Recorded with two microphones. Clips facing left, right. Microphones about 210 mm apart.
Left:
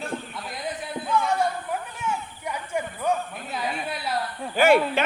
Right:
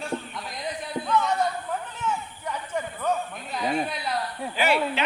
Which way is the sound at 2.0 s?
10° left (ahead or behind).